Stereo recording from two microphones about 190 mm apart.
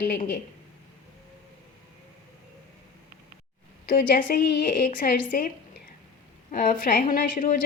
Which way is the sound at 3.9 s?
50° left (ahead or behind).